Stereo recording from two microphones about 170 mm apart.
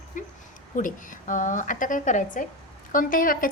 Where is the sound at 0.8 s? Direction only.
50° left (ahead or behind).